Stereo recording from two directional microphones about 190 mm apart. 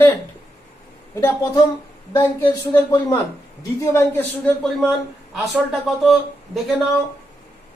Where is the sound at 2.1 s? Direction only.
15° left (ahead or behind).